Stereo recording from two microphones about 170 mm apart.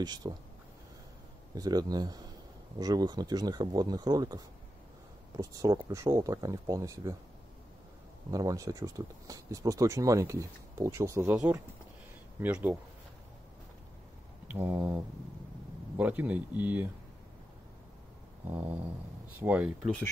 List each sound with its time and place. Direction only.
0.0 s speech: 25° right (ahead or behind)
1.5 s speech: 20° right (ahead or behind)
5.4 s speech: 20° right (ahead or behind)
8.3 s speech: 20° right (ahead or behind)
12.4 s speech: 10° right (ahead or behind)
14.5 s speech: 10° right (ahead or behind)
18.5 s speech: 10° right (ahead or behind)